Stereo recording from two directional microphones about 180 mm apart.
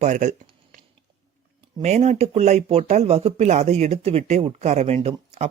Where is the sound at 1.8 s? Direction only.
40° right (ahead or behind).